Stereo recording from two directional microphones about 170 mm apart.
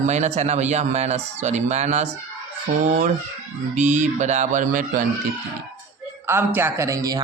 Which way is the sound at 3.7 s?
45° right (ahead or behind).